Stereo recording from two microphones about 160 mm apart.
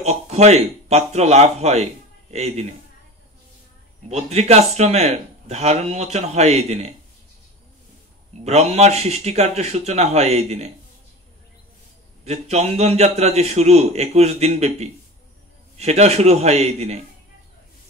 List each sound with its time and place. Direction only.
0.0 s a man's voice: 45° right (ahead or behind)
4.1 s speech: 40° right (ahead or behind)
8.5 s speech: 40° right (ahead or behind)
12.3 s speech: 45° right (ahead or behind)